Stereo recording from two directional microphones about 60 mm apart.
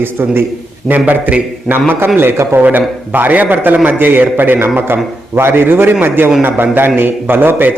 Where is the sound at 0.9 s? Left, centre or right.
Right.